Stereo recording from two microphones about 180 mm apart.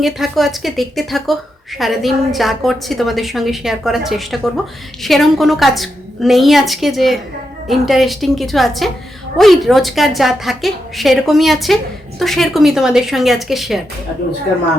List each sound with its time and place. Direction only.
0.0 s a woman's voice: centre (ahead or behind)